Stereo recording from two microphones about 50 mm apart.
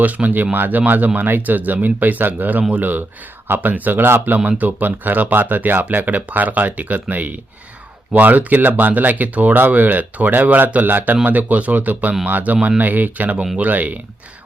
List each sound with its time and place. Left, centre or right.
0.0 s speech: right
4.4 s speech: right